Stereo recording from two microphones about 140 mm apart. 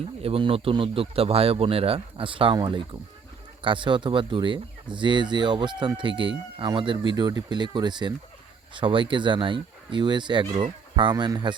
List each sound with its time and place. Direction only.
0.2 s speech: 40° right (ahead or behind)